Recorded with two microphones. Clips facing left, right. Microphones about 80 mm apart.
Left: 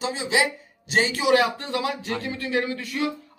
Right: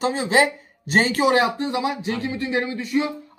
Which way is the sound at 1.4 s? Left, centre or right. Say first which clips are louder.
Right 3 dB; right.